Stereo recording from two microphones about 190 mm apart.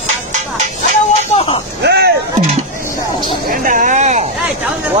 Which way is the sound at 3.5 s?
45° right (ahead or behind).